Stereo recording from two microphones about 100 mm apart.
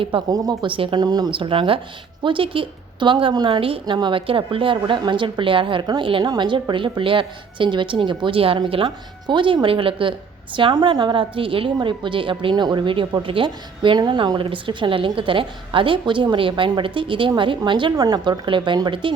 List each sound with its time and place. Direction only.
0.3 s speech: 40° right (ahead or behind)
0.6 s a woman's voice: 60° right (ahead or behind); by 1.3 s 45° right (ahead or behind)
1.3 s a woman's voice: 60° right (ahead or behind)
3.6 s speech: 65° right (ahead or behind)
3.9 s speech: 55° right (ahead or behind)
14.0 s speech: 45° right (ahead or behind)
17.9 s a woman's voice: 40° right (ahead or behind)